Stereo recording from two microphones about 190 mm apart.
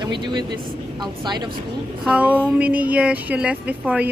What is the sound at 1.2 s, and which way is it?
Speech, 25° right (ahead or behind).